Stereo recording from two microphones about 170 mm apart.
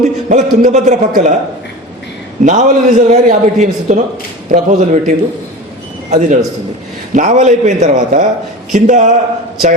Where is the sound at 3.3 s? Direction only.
50° right (ahead or behind).